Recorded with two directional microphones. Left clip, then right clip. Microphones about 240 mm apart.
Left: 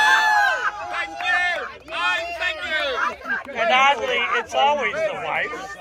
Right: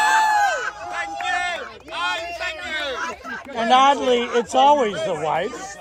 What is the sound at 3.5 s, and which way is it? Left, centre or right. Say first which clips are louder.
Speech: right 2 dB; right.